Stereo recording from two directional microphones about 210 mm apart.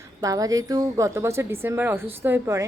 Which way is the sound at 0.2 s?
15° right (ahead or behind).